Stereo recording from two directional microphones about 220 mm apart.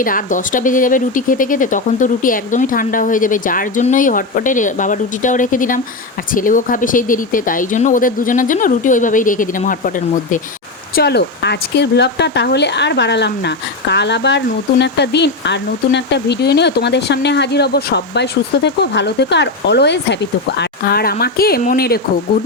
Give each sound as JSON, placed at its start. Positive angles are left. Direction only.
{"t": 0.0, "sound": "speech", "side_deg": 40}
{"t": 10.9, "sound": "speech", "side_deg": 50}